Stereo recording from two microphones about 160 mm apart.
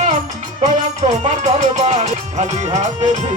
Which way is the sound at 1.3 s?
45° right (ahead or behind).